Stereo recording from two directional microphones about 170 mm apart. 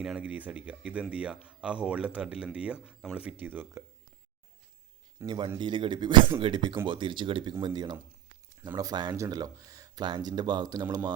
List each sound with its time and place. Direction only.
0.0 s speech: 5° right (ahead or behind)
5.2 s speech: 25° right (ahead or behind)